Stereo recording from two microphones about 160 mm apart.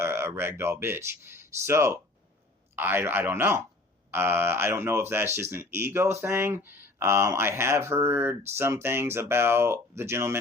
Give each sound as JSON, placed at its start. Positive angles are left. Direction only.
{"t": 0.0, "sound": "speech", "side_deg": -15}